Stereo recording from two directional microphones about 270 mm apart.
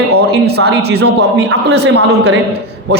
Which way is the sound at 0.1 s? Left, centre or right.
Right.